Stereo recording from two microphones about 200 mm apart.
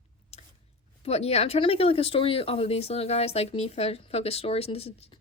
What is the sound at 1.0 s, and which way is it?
A woman's voice, 30° left (ahead or behind).